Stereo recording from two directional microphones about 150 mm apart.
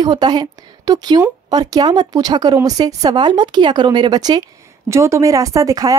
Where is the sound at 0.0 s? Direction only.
30° right (ahead or behind).